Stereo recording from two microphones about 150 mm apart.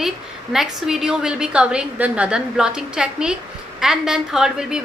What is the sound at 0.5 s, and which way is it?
A woman's voice, centre (ahead or behind).